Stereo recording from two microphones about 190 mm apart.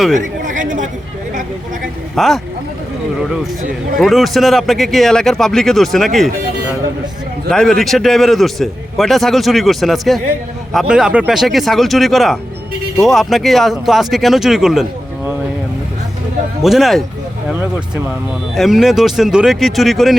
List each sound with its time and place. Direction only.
0.1 s chatter: 40° right (ahead or behind)
2.1 s speech: centre (ahead or behind)
3.9 s a man's voice: centre (ahead or behind)
7.5 s a man's voice: centre (ahead or behind)
16.6 s a man's voice: centre (ahead or behind)